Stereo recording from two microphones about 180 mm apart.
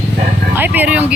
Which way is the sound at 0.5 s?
10° right (ahead or behind).